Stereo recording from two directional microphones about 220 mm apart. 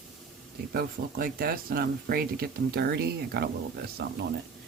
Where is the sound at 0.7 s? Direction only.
40° right (ahead or behind).